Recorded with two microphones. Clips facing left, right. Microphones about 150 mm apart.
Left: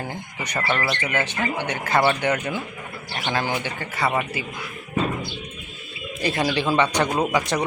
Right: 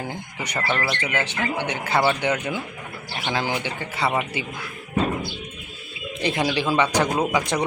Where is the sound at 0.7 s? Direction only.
10° right (ahead or behind).